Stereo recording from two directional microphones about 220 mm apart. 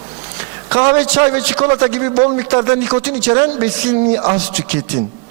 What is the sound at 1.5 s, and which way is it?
A man's voice, 25° right (ahead or behind).